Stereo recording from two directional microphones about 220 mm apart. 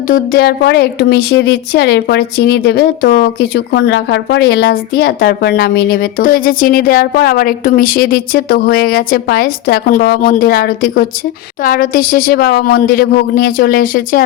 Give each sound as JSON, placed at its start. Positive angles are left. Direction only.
{"t": 0.1, "sound": "speech", "side_deg": 45}